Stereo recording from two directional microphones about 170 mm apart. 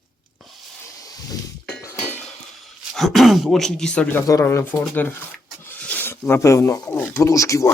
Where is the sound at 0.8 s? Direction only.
20° left (ahead or behind).